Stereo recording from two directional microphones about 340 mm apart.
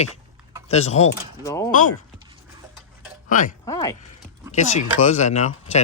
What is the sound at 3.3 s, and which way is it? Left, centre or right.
Speech, left.